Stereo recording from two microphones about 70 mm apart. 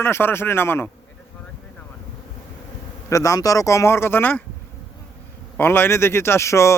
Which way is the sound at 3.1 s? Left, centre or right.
Left.